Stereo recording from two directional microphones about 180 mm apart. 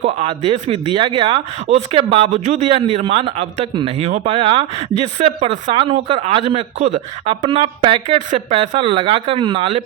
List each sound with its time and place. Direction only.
0.0 s speech: 35° right (ahead or behind)
2.3 s speech: 40° right (ahead or behind)